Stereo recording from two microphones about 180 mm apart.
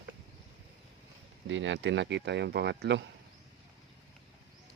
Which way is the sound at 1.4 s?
90° right.